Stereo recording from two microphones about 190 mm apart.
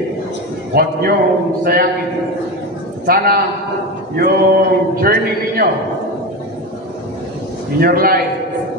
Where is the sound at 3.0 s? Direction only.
50° right (ahead or behind).